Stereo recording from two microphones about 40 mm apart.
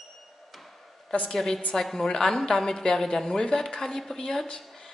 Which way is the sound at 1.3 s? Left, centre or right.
Centre.